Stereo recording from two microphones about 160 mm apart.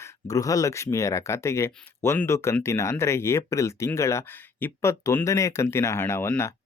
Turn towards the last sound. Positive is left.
turn(degrees=15)  # may be behind; listen again after turning